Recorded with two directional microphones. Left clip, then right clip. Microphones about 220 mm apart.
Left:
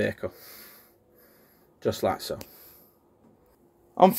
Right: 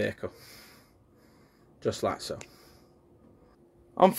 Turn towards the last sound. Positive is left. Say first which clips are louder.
# left 3 dB
turn(degrees=0)  # may be behind; listen again after turning